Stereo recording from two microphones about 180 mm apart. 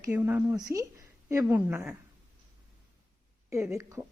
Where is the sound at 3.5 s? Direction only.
15° right (ahead or behind).